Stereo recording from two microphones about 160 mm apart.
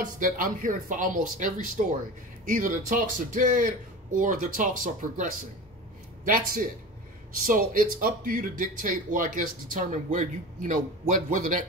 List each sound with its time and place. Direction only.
0.0 s speech: 55° right (ahead or behind)